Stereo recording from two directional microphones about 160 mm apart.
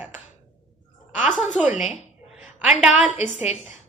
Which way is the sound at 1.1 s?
Centre (ahead or behind).